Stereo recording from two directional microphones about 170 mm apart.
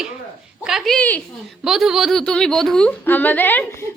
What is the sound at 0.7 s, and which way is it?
A woman's voice, 5° left (ahead or behind).